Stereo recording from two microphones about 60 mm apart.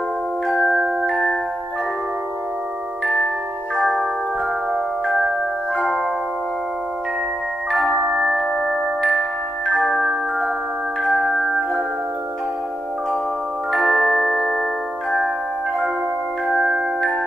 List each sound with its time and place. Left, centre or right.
0.5 s glockenspiel: centre
4.7 s glockenspiel: centre
5.8 s music: centre
7.9 s music: right
8.4 s glockenspiel: centre
11.1 s music: centre
13.7 s music: centre
14.5 s glockenspiel: centre
16.5 s music: centre